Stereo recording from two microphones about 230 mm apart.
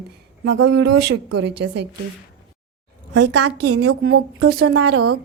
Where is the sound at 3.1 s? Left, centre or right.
Right.